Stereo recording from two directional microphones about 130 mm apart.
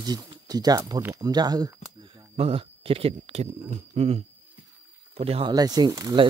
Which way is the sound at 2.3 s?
45° right (ahead or behind).